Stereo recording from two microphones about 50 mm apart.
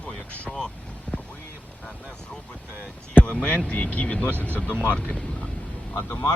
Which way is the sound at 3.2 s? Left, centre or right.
Left.